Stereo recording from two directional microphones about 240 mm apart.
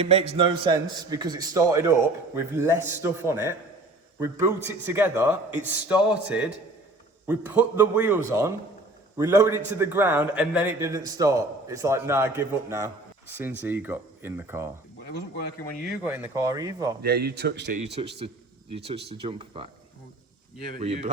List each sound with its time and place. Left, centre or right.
0.0 s a man's voice: right; by 14.7 s centre
15.9 s a man's voice: centre
17.0 s speech: right
18.0 s speech: right
20.7 s speech: right